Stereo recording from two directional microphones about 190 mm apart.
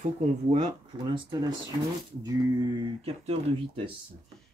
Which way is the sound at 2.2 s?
20° right (ahead or behind).